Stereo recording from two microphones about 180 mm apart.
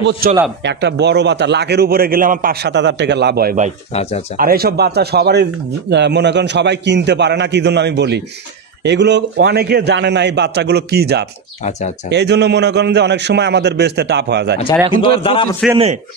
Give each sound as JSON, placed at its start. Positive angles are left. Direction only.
{"t": 0.2, "sound": "a man's voice", "side_deg": -55}
{"t": 0.7, "sound": "a man's voice", "side_deg": -70}
{"t": 3.9, "sound": "speech", "side_deg": 35}
{"t": 4.4, "sound": "a man's voice", "side_deg": -55}
{"t": 15.0, "sound": "a man's voice", "side_deg": 30}